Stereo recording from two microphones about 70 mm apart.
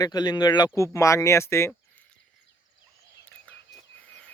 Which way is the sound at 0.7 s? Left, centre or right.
Left.